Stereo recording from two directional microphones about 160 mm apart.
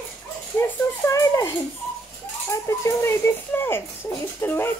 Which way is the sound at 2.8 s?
15° left (ahead or behind).